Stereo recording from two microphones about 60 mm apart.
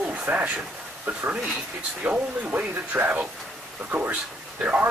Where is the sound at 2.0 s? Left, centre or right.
Right.